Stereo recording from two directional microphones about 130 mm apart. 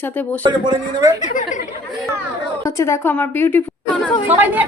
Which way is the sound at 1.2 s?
90° left.